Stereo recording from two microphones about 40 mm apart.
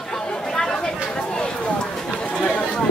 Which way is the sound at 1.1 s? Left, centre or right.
Left.